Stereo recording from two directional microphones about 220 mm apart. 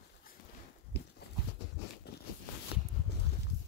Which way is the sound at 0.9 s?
50° left (ahead or behind).